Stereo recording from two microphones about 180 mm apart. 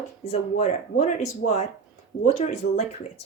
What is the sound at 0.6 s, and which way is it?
Speech, 40° left (ahead or behind).